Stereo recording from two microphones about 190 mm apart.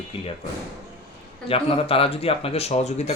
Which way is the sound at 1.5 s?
30° left (ahead or behind).